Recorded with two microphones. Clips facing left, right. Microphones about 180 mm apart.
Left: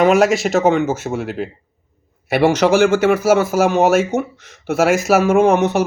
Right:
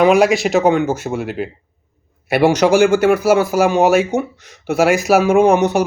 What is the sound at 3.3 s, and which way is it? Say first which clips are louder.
Speech: right 1 dB; 10° right (ahead or behind).